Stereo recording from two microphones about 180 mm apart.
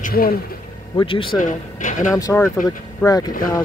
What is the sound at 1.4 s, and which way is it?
Speech, 45° left (ahead or behind).